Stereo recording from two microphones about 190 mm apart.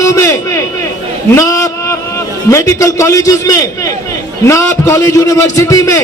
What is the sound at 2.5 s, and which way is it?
Speech, 15° left (ahead or behind).